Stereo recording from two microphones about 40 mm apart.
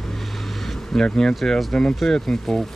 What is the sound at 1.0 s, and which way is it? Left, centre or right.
Speech, centre.